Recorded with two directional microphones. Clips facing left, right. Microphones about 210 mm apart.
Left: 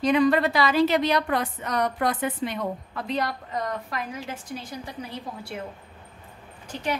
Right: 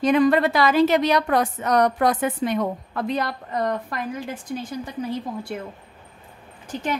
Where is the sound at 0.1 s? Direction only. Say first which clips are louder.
Right 2 dB; 50° right (ahead or behind).